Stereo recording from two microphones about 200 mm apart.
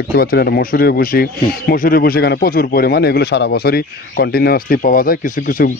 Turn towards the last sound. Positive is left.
turn(degrees=45)  # may be behind; listen again after turning